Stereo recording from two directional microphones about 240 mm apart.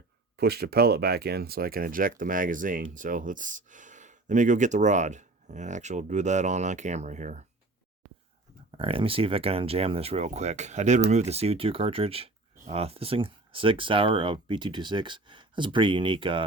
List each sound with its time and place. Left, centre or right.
0.3 s speech: right
8.8 s speech: right